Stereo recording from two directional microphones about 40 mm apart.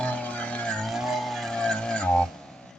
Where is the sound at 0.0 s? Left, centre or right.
Left.